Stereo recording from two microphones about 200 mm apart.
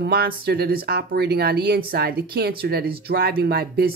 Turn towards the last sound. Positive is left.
turn(degrees=-50)  # may be behind; listen again after turning